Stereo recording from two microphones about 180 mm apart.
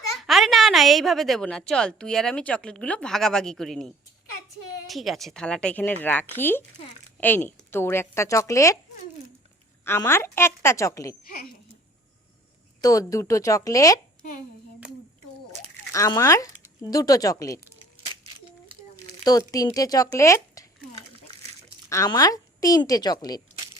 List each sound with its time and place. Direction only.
0.2 s a woman's voice: centre (ahead or behind); by 8.8 s 15° left (ahead or behind)
9.8 s a woman's voice: 15° left (ahead or behind)
12.8 s a woman's voice: 20° left (ahead or behind)
15.9 s a woman's voice: 20° left (ahead or behind)
19.2 s a woman's voice: 20° left (ahead or behind)
20.9 s a sound: 35° right (ahead or behind)
21.8 s a woman's voice: 15° left (ahead or behind)